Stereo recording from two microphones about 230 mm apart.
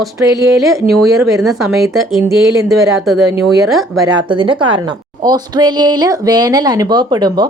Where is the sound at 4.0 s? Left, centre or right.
Centre.